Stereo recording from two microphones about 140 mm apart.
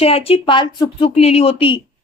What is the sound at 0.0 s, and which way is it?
A woman's voice, 45° left (ahead or behind).